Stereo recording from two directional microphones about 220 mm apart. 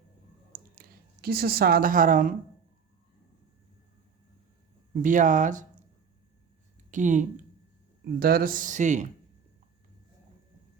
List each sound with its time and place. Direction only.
0.5 s a sound: 40° right (ahead or behind)
5.0 s speech: 35° right (ahead or behind)
6.9 s speech: 35° right (ahead or behind)